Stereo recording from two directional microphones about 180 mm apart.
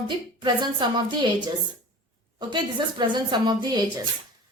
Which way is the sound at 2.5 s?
25° right (ahead or behind).